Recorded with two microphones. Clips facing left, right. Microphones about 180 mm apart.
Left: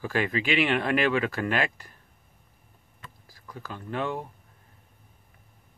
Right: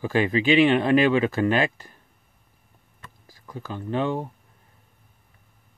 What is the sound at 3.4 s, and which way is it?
Speech, 20° right (ahead or behind).